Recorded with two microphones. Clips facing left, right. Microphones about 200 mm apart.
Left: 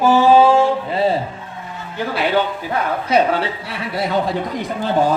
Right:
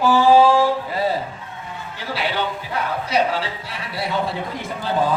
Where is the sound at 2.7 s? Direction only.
55° left (ahead or behind).